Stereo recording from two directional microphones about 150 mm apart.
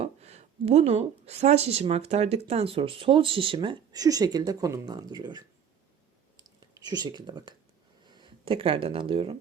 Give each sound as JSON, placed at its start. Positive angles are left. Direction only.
{"t": 0.0, "sound": "speech", "side_deg": -45}
{"t": 6.6, "sound": "speech", "side_deg": -25}